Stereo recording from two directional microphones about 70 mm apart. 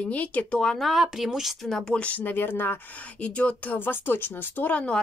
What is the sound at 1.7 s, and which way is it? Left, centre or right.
Speech, centre.